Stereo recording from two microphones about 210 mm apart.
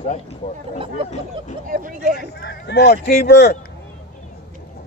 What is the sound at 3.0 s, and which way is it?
Speech, 50° left (ahead or behind).